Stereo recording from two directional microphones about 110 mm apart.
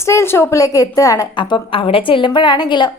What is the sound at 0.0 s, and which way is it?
A woman's voice, 25° left (ahead or behind).